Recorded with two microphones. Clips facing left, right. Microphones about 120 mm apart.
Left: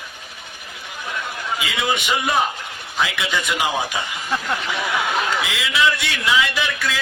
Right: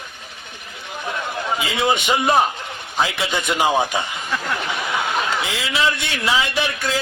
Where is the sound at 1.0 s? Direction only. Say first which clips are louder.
Right 3 dB; 30° right (ahead or behind).